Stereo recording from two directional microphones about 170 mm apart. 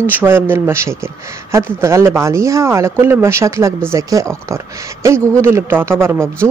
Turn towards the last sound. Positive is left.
turn(degrees=-15)  # may be behind; listen again after turning